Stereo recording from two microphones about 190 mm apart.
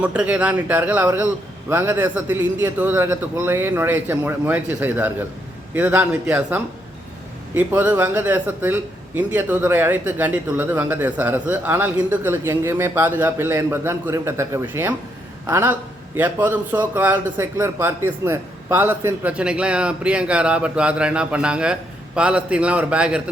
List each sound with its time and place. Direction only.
0.0 s a man's voice: 5° right (ahead or behind)